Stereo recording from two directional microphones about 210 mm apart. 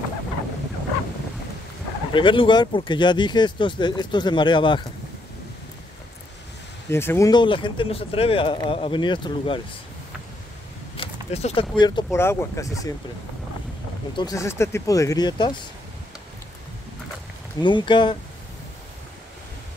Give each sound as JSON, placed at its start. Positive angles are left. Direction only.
{"t": 2.1, "sound": "speech", "side_deg": 25}
{"t": 6.9, "sound": "speech", "side_deg": 10}
{"t": 11.0, "sound": "a sound", "side_deg": 30}
{"t": 11.7, "sound": "speech", "side_deg": 20}
{"t": 14.1, "sound": "speech", "side_deg": 15}
{"t": 17.6, "sound": "speech", "side_deg": 20}